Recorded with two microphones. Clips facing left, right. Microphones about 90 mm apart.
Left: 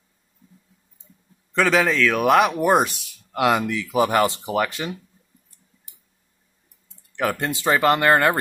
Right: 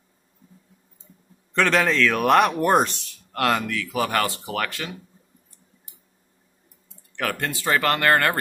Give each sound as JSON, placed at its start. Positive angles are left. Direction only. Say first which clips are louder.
{"t": 1.5, "sound": "speech", "louder": "left 1 dB", "side_deg": 5}
{"t": 7.2, "sound": "speech", "louder": "left 3 dB", "side_deg": 15}